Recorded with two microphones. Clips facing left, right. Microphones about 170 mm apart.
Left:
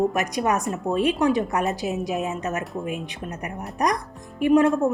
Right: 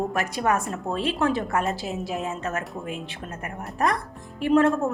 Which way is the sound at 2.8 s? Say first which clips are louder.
Left 3 dB; 15° left (ahead or behind).